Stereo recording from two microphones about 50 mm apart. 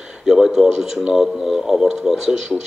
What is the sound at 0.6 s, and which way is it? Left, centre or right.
Speech, centre.